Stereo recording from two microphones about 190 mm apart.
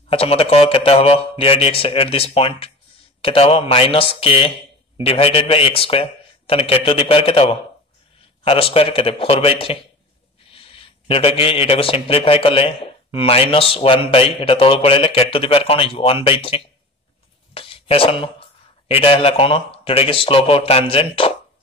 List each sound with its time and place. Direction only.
0.1 s a man's voice: 30° left (ahead or behind)
17.6 s a sound: 30° left (ahead or behind)
18.9 s a man's voice: 30° left (ahead or behind)